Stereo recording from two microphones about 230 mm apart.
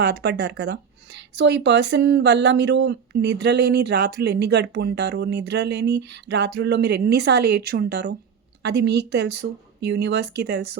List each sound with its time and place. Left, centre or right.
0.0 s speech: right